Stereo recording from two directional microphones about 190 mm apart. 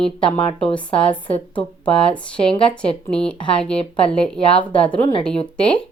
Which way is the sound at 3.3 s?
25° left (ahead or behind).